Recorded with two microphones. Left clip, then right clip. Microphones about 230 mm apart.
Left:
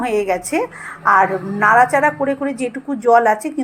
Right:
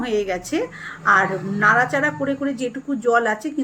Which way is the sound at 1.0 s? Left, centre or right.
Centre.